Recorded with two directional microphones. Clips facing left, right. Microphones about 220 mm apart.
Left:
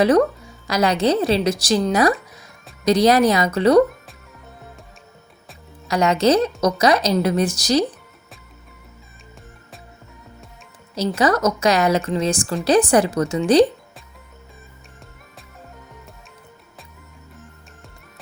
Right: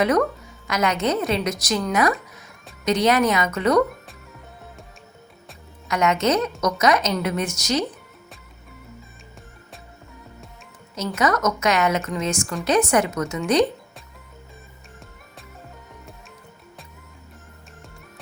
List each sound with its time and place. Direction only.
0.0 s a woman's voice: 30° left (ahead or behind)
5.9 s a woman's voice: 35° left (ahead or behind)
10.9 s a woman's voice: 30° left (ahead or behind)